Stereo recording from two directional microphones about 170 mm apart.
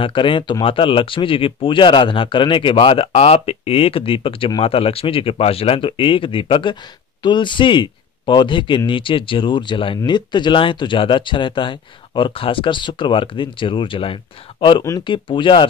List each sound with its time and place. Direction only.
0.0 s speech: 30° left (ahead or behind)